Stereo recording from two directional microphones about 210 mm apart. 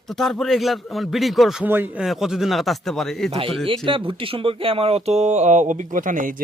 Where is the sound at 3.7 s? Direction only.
25° right (ahead or behind).